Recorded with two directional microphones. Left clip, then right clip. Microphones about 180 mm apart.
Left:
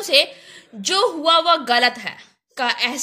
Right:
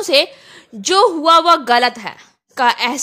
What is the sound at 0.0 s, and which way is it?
A woman's voice, 40° right (ahead or behind).